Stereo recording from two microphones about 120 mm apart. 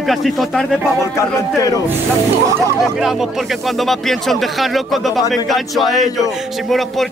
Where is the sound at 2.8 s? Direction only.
Centre (ahead or behind).